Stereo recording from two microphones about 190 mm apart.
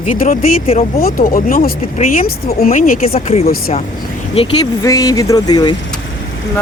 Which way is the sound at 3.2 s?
30° left (ahead or behind).